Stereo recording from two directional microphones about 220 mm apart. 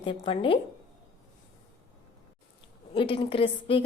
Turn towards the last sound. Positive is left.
turn(degrees=25)  # may be behind; listen again after turning